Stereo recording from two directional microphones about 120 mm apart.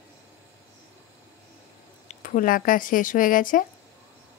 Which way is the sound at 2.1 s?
90° left.